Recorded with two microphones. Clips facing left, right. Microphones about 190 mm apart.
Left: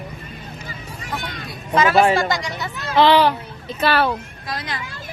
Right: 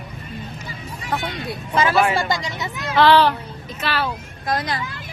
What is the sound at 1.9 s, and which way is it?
Speech, 30° left (ahead or behind).